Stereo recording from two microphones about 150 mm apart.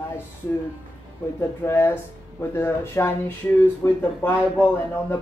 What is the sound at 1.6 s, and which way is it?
Speech, 15° left (ahead or behind).